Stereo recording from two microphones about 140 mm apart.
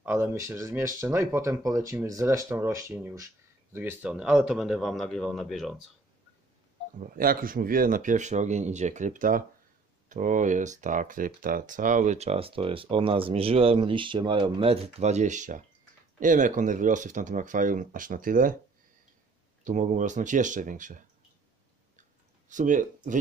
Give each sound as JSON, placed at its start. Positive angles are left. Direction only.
{"t": 0.0, "sound": "a man's voice", "side_deg": -15}
{"t": 7.0, "sound": "speech", "side_deg": -90}
{"t": 19.6, "sound": "speech", "side_deg": -60}
{"t": 22.5, "sound": "speech", "side_deg": -65}